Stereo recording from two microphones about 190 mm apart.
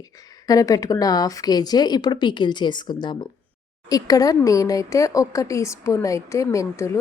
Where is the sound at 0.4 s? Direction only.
20° left (ahead or behind).